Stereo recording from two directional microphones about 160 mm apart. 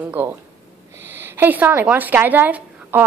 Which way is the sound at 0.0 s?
10° right (ahead or behind).